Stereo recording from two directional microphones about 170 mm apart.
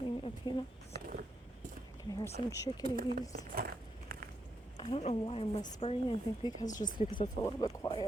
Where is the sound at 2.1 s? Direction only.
20° left (ahead or behind).